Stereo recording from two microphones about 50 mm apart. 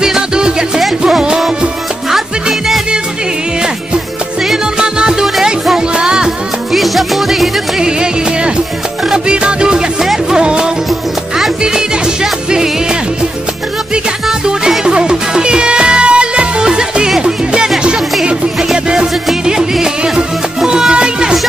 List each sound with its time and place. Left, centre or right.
0.0 s music: centre
6.7 s music: centre
7.8 s music: centre
10.9 s music: centre
11.6 s music: centre
14.2 s music: centre
18.7 s music: centre